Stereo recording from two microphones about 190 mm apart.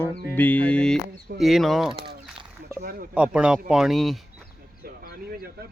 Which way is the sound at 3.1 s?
5° right (ahead or behind).